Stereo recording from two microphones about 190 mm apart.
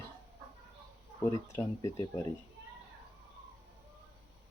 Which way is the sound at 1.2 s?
15° left (ahead or behind).